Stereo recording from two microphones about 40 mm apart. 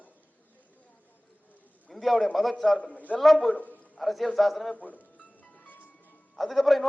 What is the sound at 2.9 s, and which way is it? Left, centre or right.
Speech, left.